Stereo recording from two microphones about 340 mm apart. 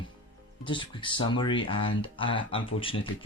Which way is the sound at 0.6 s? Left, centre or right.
Centre.